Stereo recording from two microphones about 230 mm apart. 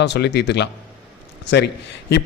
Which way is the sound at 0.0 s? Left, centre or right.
Left.